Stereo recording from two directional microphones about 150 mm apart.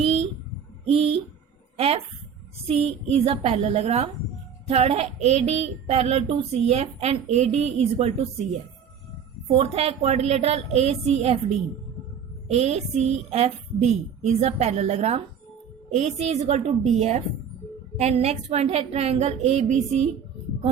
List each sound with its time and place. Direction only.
0.9 s a woman's voice: 40° right (ahead or behind)
9.5 s speech: 40° right (ahead or behind)